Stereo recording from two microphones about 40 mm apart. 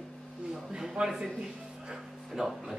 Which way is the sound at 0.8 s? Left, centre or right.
Centre.